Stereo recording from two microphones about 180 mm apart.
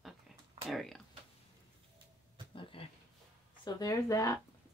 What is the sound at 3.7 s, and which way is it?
Speech, 20° left (ahead or behind).